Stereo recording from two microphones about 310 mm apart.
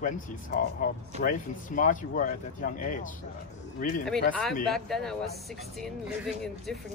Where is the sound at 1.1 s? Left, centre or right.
Right.